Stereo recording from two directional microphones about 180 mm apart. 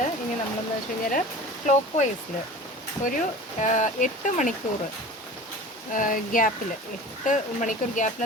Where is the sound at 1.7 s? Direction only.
40° left (ahead or behind).